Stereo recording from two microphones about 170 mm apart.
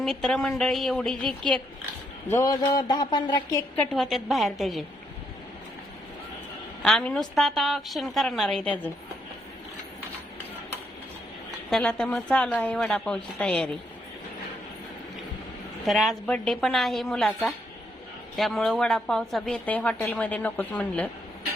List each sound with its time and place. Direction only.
0.0 s a woman's voice: centre (ahead or behind)
2.2 s speech: 20° left (ahead or behind)
3.8 s a woman's voice: centre (ahead or behind)
6.8 s a woman's voice: 5° left (ahead or behind)
11.7 s a woman's voice: 5° left (ahead or behind)
15.9 s a woman's voice: centre (ahead or behind)